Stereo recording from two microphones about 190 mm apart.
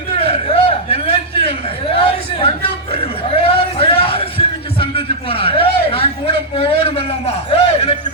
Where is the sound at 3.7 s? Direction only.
30° left (ahead or behind).